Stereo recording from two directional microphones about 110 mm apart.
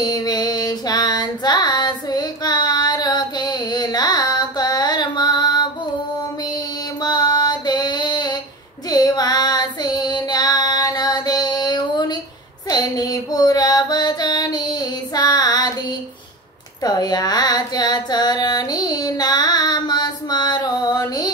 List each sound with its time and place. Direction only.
0.0 s female singing: 35° left (ahead or behind)
6.4 s music: 40° left (ahead or behind)
8.8 s child singing: 35° left (ahead or behind)
12.6 s female singing: 35° left (ahead or behind)
16.8 s music: 35° left (ahead or behind)